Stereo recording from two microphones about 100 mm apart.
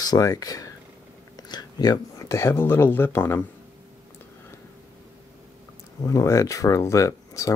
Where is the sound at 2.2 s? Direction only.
30° left (ahead or behind).